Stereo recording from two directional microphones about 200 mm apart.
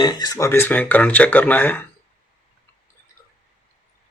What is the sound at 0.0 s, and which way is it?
Speech, 20° left (ahead or behind).